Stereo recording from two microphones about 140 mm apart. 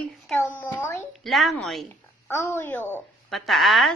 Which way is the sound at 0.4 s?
15° left (ahead or behind).